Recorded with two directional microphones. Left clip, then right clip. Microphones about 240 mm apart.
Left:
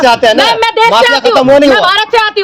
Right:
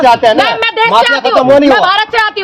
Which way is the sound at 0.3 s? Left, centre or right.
Centre.